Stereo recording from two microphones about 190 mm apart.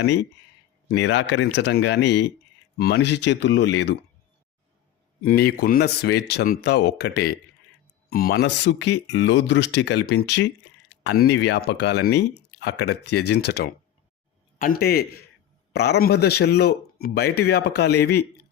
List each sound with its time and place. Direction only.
0.9 s speech: 70° left (ahead or behind)
5.2 s speech: 50° left (ahead or behind)